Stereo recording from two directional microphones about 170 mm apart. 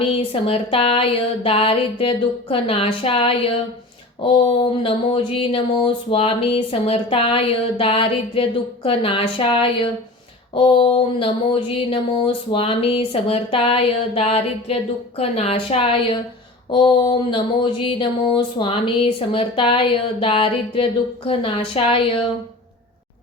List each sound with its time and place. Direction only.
0.0 s speech: 35° left (ahead or behind)